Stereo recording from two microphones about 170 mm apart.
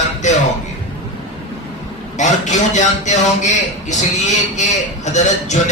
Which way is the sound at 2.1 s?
45° left (ahead or behind).